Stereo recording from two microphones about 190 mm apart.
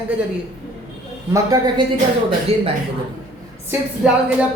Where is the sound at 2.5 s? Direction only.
30° right (ahead or behind).